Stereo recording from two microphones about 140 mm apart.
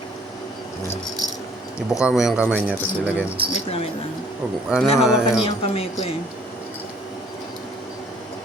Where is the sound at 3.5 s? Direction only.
45° left (ahead or behind).